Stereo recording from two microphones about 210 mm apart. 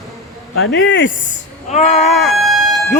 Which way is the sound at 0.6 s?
65° left (ahead or behind).